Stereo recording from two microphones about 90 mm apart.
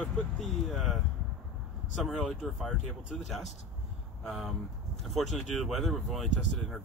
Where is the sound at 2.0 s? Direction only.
Centre (ahead or behind).